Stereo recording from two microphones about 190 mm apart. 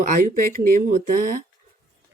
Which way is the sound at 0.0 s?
45° right (ahead or behind).